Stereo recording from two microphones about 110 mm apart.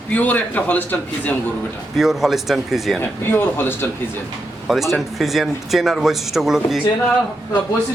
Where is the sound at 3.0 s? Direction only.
20° left (ahead or behind).